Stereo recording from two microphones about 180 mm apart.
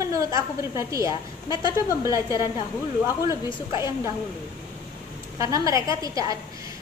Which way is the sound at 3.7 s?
15° right (ahead or behind).